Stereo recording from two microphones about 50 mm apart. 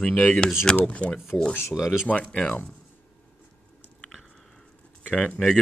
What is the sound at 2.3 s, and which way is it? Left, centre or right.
Speech, left.